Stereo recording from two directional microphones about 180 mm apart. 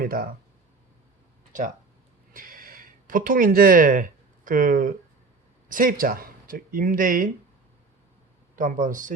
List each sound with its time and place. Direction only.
0.0 s speech: 55° right (ahead or behind)
2.3 s a sound: 50° right (ahead or behind)
5.6 s speech: 50° right (ahead or behind)
8.5 s speech: 45° right (ahead or behind)